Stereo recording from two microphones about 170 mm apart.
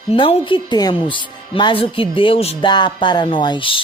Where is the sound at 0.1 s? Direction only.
35° left (ahead or behind).